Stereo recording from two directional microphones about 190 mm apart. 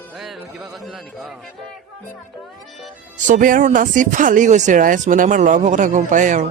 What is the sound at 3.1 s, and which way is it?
Speech, 40° right (ahead or behind).